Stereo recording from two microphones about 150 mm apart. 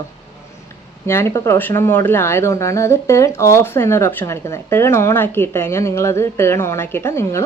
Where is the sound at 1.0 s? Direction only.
15° left (ahead or behind).